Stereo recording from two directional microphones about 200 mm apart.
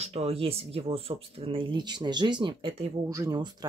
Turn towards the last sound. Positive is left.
turn(degrees=-20)  # may be behind; listen again after turning